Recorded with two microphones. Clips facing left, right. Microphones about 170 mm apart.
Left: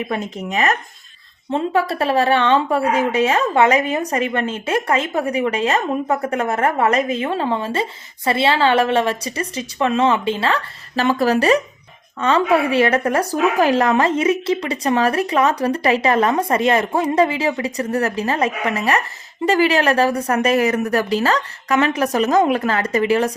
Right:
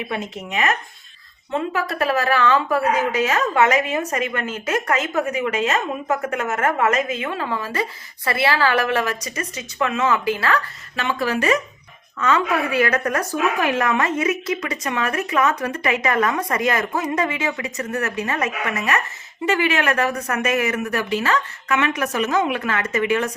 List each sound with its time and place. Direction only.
0.5 s a woman's voice: 40° left (ahead or behind)
11.0 s speech: 40° left (ahead or behind)